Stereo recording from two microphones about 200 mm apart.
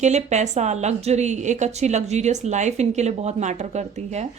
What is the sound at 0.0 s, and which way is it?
A woman's voice, 35° right (ahead or behind).